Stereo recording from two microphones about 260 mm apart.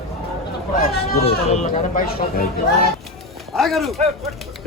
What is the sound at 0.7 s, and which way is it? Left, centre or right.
Speech, left.